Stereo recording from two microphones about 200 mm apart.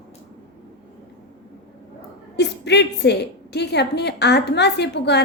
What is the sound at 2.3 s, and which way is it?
A woman's voice, 60° left (ahead or behind).